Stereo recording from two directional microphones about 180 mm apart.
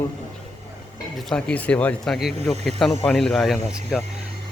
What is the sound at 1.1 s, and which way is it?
Speech, 5° left (ahead or behind).